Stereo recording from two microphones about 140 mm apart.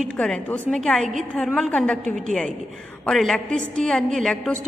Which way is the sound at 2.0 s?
65° right (ahead or behind).